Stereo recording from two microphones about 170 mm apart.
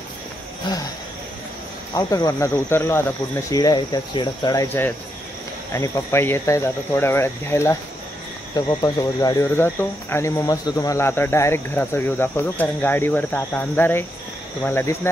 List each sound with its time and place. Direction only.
0.7 s speech: 25° left (ahead or behind)
2.0 s speech: 20° left (ahead or behind)